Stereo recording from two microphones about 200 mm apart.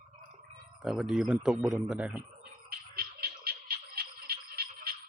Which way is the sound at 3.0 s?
50° right (ahead or behind).